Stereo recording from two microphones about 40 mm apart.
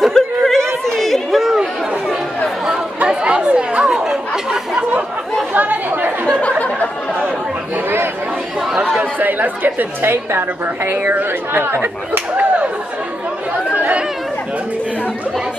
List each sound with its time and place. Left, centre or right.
0.0 s a sound: centre
0.9 s chatter: centre
1.4 s chatter: centre
3.1 s chatter: right
4.1 s chatter: centre
5.5 s chatter: right
9.2 s a woman's voice: right
11.6 s speech: right